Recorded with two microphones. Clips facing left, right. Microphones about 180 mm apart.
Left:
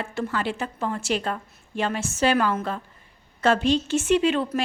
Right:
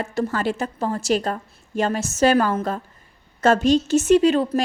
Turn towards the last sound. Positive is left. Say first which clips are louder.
# right 5 dB
turn(degrees=-40)  # may be behind; listen again after turning